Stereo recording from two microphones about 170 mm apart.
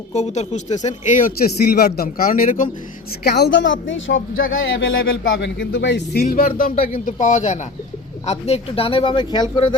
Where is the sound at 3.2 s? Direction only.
70° left (ahead or behind); by 4.1 s 90° left.